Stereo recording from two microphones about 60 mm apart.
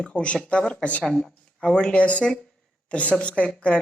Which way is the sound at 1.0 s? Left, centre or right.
Centre.